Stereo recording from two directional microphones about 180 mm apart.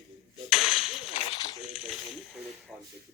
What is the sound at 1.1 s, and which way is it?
Speech, 35° left (ahead or behind).